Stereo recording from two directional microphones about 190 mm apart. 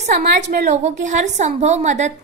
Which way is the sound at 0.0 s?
35° right (ahead or behind).